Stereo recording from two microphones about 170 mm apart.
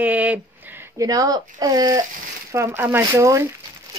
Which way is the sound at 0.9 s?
20° right (ahead or behind).